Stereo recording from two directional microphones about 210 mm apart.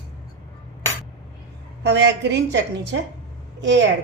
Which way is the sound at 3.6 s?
60° right (ahead or behind).